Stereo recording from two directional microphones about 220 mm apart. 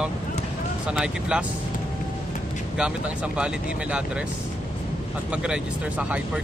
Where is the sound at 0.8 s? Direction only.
5° right (ahead or behind).